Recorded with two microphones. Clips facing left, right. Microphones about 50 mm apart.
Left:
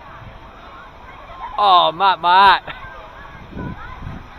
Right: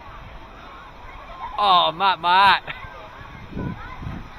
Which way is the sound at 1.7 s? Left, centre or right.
Left.